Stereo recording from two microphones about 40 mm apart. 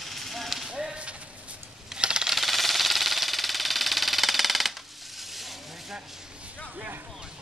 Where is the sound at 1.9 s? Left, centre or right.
Right.